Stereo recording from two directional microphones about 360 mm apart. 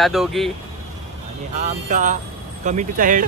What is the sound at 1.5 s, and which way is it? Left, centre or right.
Speech, right.